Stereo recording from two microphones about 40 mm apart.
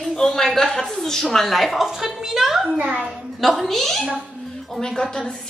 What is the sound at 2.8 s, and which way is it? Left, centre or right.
Speech, right.